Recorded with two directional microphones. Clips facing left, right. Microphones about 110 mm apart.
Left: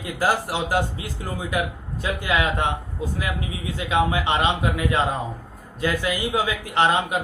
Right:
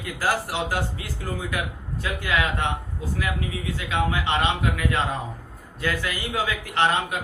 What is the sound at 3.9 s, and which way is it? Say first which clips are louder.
A man's voice: left 4 dB; 20° left (ahead or behind).